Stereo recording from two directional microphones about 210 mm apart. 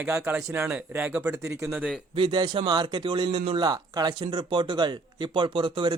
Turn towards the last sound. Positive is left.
turn(degrees=-25)  # may be behind; listen again after turning